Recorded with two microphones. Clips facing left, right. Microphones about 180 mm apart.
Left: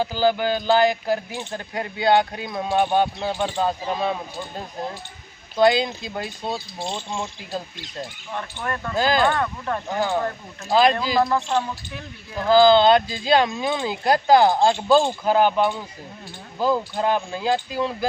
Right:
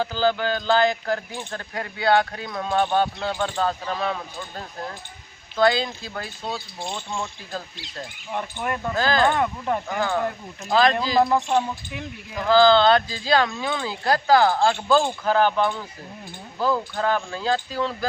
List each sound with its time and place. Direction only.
0.0 s speech: 15° left (ahead or behind)
8.3 s speech: 15° right (ahead or behind)
9.0 s speech: 15° left (ahead or behind)
9.2 s speech: 15° right (ahead or behind)
9.8 s speech: 20° left (ahead or behind)
11.2 s speech: 15° right (ahead or behind)
12.5 s speech: 15° left (ahead or behind)